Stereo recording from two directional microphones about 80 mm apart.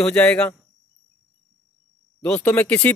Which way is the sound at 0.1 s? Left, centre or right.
Centre.